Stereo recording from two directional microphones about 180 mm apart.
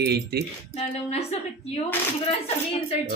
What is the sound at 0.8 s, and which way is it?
Speech, 35° left (ahead or behind).